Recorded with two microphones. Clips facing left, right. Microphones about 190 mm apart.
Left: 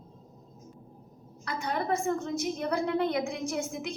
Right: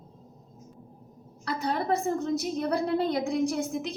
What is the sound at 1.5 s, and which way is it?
A woman's voice, 35° right (ahead or behind).